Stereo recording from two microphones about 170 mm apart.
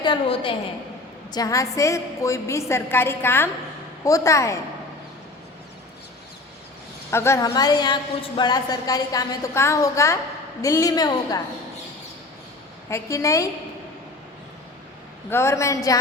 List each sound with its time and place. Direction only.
0.0 s a woman's voice: 30° left (ahead or behind)
7.1 s a woman's voice: 15° left (ahead or behind)
12.9 s a woman's voice: 20° left (ahead or behind)
15.3 s a woman's voice: 15° left (ahead or behind)